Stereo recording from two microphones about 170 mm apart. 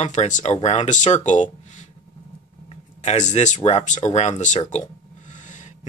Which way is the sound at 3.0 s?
45° left (ahead or behind).